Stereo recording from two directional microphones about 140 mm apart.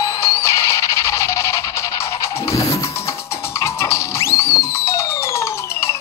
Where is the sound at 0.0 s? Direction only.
20° left (ahead or behind).